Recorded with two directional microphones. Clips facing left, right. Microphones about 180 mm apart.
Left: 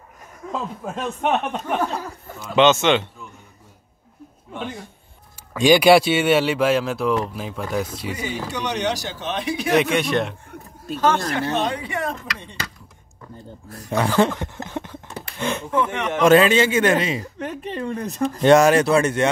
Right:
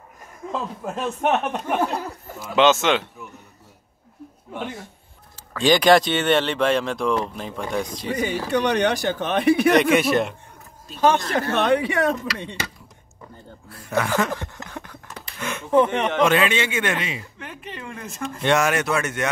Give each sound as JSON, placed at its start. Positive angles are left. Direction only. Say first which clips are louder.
{"t": 0.5, "sound": "speech", "louder": "even", "side_deg": 0}
{"t": 5.5, "sound": "speech", "louder": "left 3 dB", "side_deg": 10}
{"t": 8.5, "sound": "speech", "louder": "right 5 dB", "side_deg": -60}
{"t": 9.9, "sound": "speech", "louder": "right 2 dB", "side_deg": -5}
{"t": 11.5, "sound": "speech", "louder": "right 4 dB", "side_deg": -65}
{"t": 13.7, "sound": "a man's voice", "louder": "left 1 dB", "side_deg": 40}
{"t": 14.4, "sound": "a sound", "louder": "left 6 dB", "side_deg": 20}
{"t": 15.7, "sound": "speech", "louder": "right 7 dB", "side_deg": -30}
{"t": 16.2, "sound": "a man's voice", "louder": "left 7 dB", "side_deg": 40}